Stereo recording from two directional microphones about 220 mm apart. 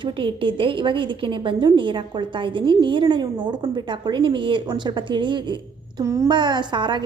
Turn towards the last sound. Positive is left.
turn(degrees=-20)  # may be behind; listen again after turning